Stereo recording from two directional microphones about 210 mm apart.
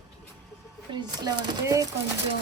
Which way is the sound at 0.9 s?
20° right (ahead or behind).